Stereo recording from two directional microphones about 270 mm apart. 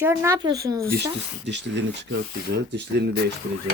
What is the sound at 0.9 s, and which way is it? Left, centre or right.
Speech, right.